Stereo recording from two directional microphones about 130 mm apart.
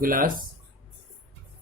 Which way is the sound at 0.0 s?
90° right.